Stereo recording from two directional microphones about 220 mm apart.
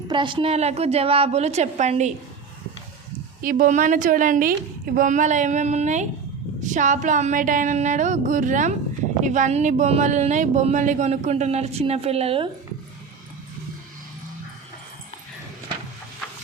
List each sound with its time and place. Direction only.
0.1 s a woman's voice: 20° right (ahead or behind)
3.4 s speech: 40° right (ahead or behind)